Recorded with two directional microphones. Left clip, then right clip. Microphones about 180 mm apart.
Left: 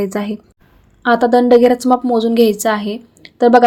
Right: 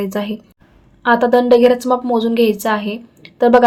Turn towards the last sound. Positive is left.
turn(degrees=40)  # may be behind; listen again after turning